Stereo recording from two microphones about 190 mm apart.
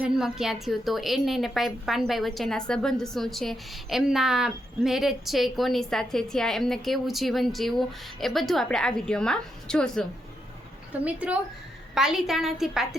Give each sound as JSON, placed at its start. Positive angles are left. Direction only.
{"t": 0.0, "sound": "a woman's voice", "side_deg": -5}